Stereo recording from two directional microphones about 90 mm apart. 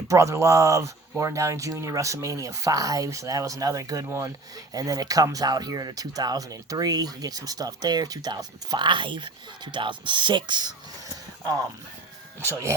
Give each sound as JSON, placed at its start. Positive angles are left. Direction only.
{"t": 0.1, "sound": "speech", "side_deg": -35}